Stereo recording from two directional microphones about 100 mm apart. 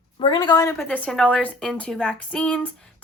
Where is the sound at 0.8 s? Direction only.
15° left (ahead or behind).